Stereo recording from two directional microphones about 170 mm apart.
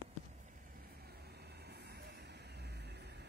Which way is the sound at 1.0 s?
65° right (ahead or behind).